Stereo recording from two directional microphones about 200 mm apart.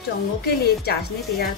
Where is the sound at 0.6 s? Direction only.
50° left (ahead or behind).